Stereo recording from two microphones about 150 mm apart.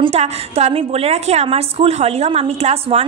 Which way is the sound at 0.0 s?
45° right (ahead or behind).